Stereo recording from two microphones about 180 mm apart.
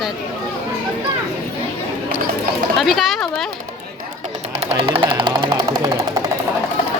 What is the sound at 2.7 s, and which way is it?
Speech, centre (ahead or behind).